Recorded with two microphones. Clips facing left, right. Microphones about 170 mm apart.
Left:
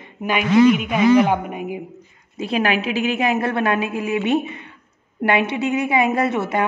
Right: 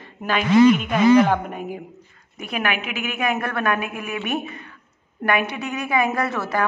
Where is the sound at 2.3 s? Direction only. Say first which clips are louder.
Left 5 dB; 30° left (ahead or behind).